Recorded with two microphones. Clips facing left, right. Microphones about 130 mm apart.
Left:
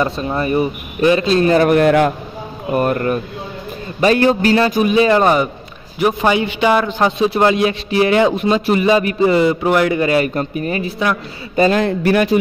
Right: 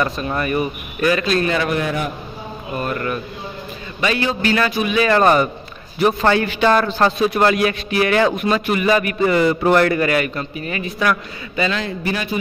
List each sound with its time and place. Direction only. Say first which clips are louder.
0.0 s a man's voice: left 3 dB; 25° left (ahead or behind)
1.7 s a man's voice: left 10 dB; 65° left (ahead or behind)
2.7 s speech: left 8 dB; 50° left (ahead or behind)
4.0 s a man's voice: left 7 dB; 45° left (ahead or behind)
5.0 s a man's voice: left 1 dB; 15° left (ahead or behind)
10.3 s a man's voice: left 6 dB; 40° left (ahead or behind)
11.5 s speech: left 8 dB; 45° left (ahead or behind); by 12.4 s 60° left (ahead or behind)